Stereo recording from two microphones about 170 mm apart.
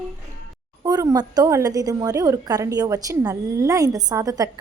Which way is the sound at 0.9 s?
25° right (ahead or behind).